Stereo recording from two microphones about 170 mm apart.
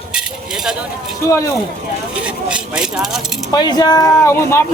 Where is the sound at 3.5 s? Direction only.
25° left (ahead or behind).